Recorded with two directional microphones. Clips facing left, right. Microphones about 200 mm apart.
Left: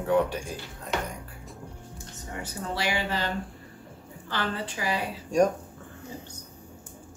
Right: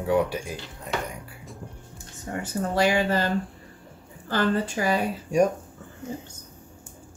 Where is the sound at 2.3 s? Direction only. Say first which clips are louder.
Right 7 dB; 50° right (ahead or behind).